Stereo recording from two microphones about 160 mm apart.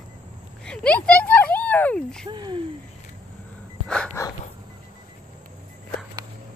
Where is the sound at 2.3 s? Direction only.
30° right (ahead or behind).